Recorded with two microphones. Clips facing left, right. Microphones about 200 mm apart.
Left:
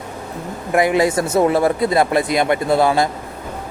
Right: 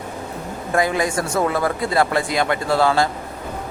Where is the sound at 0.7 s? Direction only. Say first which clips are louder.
Left 5 dB; 20° left (ahead or behind).